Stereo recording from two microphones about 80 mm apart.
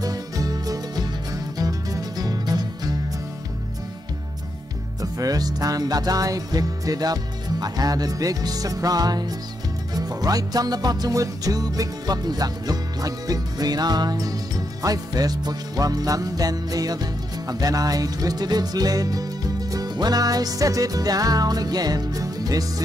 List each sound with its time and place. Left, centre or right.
0.0 s music: right
5.0 s music: right